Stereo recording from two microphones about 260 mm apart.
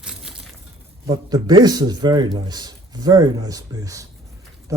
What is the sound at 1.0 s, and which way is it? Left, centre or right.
Speech, centre.